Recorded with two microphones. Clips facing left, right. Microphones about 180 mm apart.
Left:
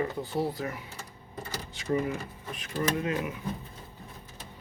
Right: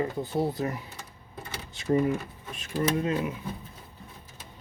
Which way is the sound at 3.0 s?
30° right (ahead or behind).